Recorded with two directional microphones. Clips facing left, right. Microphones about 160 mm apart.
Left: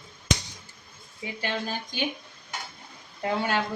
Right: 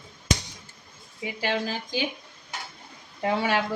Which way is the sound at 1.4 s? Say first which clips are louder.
Right 4 dB; 90° right.